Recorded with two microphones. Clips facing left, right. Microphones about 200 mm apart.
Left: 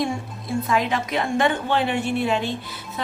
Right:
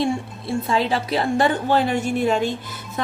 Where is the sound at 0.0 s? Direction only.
30° right (ahead or behind).